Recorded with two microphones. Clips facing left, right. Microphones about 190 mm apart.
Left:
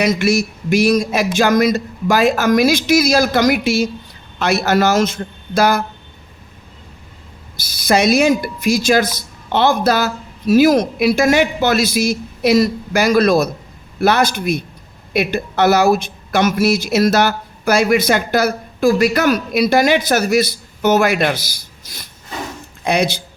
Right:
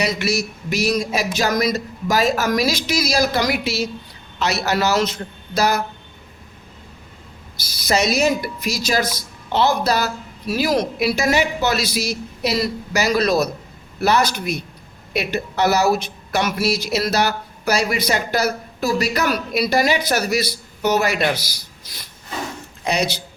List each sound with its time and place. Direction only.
0.0 s speech: 50° left (ahead or behind)
7.9 s speech: 55° left (ahead or behind)